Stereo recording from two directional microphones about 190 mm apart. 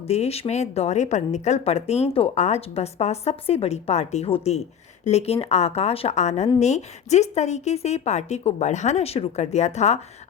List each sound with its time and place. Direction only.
0.1 s a woman's voice: 35° left (ahead or behind)